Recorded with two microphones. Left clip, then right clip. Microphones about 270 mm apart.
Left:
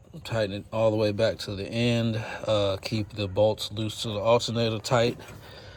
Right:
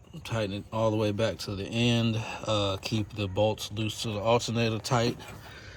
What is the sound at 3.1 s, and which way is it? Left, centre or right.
Speech, centre.